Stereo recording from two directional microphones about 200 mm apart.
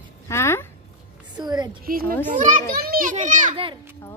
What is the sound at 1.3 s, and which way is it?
Speech, 20° right (ahead or behind).